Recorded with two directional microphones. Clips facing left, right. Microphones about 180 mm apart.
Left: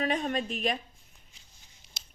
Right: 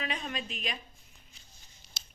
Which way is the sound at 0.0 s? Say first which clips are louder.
Left 8 dB; 45° left (ahead or behind).